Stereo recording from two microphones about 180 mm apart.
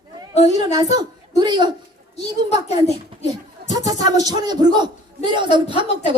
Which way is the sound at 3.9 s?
20° right (ahead or behind).